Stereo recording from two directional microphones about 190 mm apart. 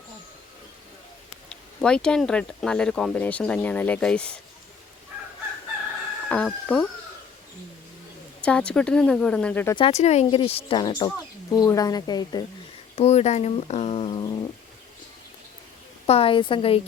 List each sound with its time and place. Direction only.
1.5 s speech: 5° left (ahead or behind)
6.2 s speech: 5° left (ahead or behind)
8.4 s speech: 5° left (ahead or behind)
9.7 s speech: 30° left (ahead or behind)
13.0 s speech: 35° left (ahead or behind)
16.0 s speech: 30° left (ahead or behind)